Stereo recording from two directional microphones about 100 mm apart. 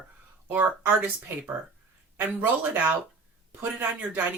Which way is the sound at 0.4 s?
15° right (ahead or behind).